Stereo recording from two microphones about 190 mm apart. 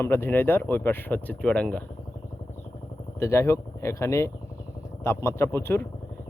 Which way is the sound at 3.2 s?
15° left (ahead or behind).